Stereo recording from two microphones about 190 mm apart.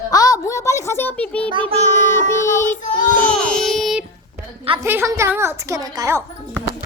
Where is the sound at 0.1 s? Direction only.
20° left (ahead or behind).